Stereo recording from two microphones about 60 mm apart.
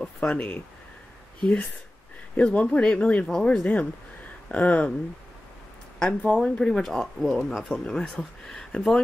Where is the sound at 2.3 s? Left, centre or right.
Left.